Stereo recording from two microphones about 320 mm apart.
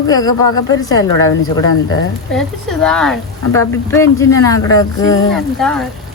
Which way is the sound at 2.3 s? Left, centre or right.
Centre.